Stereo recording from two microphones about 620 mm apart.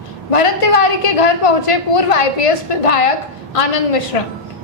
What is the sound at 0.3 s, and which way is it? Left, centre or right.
A woman's voice, left.